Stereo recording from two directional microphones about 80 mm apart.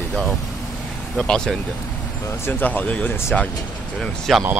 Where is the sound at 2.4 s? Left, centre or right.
Left.